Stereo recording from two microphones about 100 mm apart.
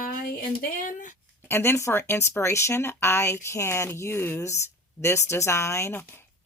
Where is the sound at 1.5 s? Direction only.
25° left (ahead or behind).